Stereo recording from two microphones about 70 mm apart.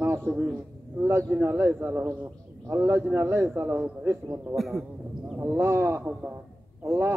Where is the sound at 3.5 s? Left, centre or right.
Right.